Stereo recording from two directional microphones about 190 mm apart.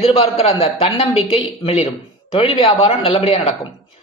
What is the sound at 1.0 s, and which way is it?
A man's voice, 25° left (ahead or behind).